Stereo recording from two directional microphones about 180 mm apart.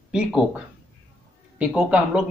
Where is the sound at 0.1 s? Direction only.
5° right (ahead or behind).